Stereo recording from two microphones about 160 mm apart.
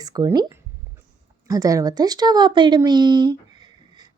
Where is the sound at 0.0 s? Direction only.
25° right (ahead or behind).